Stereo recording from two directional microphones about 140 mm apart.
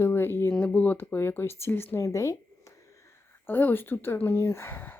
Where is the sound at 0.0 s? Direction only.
15° left (ahead or behind).